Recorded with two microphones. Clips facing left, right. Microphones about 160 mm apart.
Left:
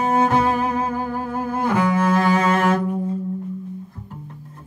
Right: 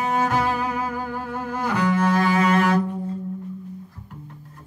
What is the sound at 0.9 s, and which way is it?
Music, 40° left (ahead or behind).